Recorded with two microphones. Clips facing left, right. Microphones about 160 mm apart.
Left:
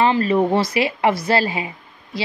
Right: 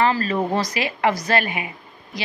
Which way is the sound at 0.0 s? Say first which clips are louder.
Left 4 dB; 25° left (ahead or behind).